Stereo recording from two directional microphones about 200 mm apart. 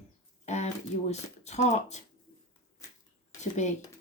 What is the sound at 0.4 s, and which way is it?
Speech, 35° left (ahead or behind).